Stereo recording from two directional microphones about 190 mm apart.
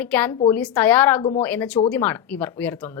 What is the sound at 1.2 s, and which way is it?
Speech, 30° left (ahead or behind).